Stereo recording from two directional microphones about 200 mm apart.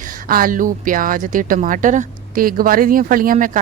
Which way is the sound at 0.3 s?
45° right (ahead or behind).